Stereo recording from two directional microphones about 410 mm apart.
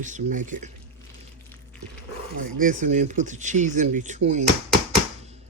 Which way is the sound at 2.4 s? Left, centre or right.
Centre.